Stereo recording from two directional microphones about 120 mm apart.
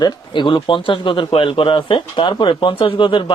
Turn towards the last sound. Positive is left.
turn(degrees=45)  # may be behind; listen again after turning